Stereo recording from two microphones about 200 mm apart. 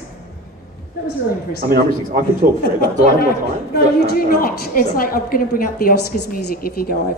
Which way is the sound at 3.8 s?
50° left (ahead or behind).